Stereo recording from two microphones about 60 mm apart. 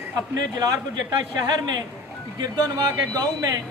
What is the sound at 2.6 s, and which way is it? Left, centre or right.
Speech, right.